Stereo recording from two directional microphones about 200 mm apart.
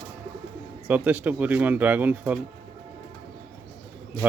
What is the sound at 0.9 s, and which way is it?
Speech, 10° right (ahead or behind).